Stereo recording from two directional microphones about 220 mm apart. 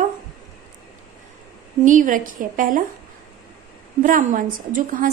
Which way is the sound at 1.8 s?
35° right (ahead or behind).